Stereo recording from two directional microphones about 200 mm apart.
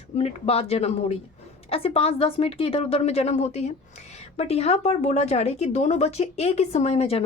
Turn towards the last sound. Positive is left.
turn(degrees=30)  # may be behind; listen again after turning